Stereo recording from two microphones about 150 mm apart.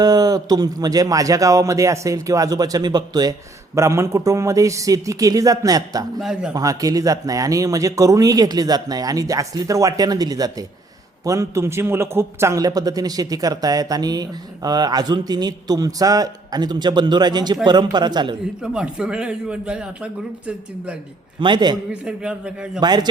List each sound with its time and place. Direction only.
0.0 s a man's voice: 25° right (ahead or behind)
6.1 s speech: 5° right (ahead or behind)
6.5 s a man's voice: 25° right (ahead or behind)
18.6 s speech: 5° right (ahead or behind)
21.3 s a man's voice: 30° right (ahead or behind)
22.0 s speech: 5° right (ahead or behind)
22.8 s a man's voice: 30° right (ahead or behind)